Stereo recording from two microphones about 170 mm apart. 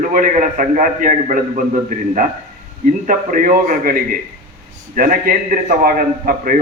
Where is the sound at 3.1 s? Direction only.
55° right (ahead or behind).